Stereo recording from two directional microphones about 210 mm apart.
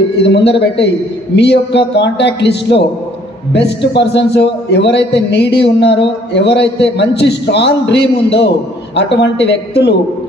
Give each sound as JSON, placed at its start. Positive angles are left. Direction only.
{"t": 0.2, "sound": "a man's voice", "side_deg": 55}